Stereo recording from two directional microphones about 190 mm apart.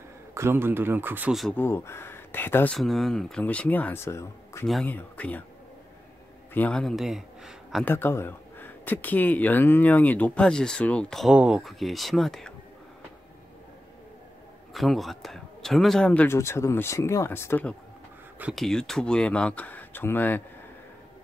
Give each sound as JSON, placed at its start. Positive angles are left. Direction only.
{"t": 0.3, "sound": "speech", "side_deg": -15}
{"t": 1.6, "sound": "speech", "side_deg": 10}
{"t": 6.5, "sound": "speech", "side_deg": 5}
{"t": 7.8, "sound": "speech", "side_deg": 10}
{"t": 14.7, "sound": "speech", "side_deg": 0}